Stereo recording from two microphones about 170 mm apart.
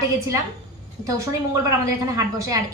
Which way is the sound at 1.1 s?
20° right (ahead or behind).